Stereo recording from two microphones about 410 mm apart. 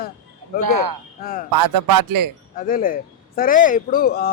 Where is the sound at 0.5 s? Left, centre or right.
Right.